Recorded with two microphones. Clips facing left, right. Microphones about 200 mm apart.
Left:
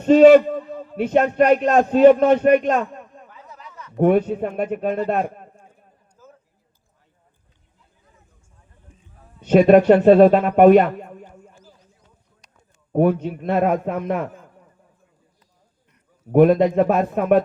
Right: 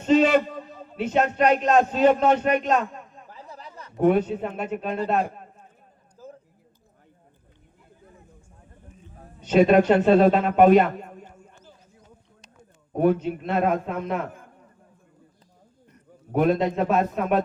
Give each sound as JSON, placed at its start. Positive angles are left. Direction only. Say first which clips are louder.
{"t": 0.0, "sound": "a man's voice", "louder": "left 9 dB", "side_deg": 55}
{"t": 3.2, "sound": "a sound", "louder": "right 1 dB", "side_deg": -30}
{"t": 3.9, "sound": "speech", "louder": "left 3 dB", "side_deg": 55}
{"t": 6.2, "sound": "a sound", "louder": "right 6 dB", "side_deg": -35}
{"t": 9.4, "sound": "speech", "louder": "left 5 dB", "side_deg": 55}
{"t": 12.9, "sound": "a man's voice", "louder": "left 3 dB", "side_deg": 55}
{"t": 16.3, "sound": "a man's voice", "louder": "left 7 dB", "side_deg": 55}